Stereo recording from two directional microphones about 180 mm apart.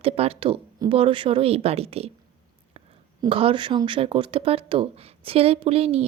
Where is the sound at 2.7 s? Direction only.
30° right (ahead or behind).